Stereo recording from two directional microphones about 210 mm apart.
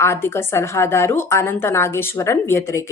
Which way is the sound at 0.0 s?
10° left (ahead or behind).